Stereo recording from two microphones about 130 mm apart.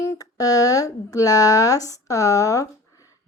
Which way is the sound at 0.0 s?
25° left (ahead or behind).